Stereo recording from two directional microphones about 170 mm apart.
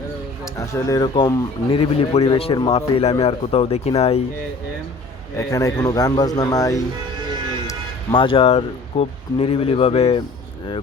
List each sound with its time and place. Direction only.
0.5 s a man's voice: 15° left (ahead or behind)
1.7 s a man's voice: 35° left (ahead or behind)
5.4 s a man's voice: 20° left (ahead or behind)
8.1 s a man's voice: 30° left (ahead or behind)